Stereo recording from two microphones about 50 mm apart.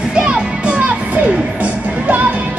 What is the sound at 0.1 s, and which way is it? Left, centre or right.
Music, centre.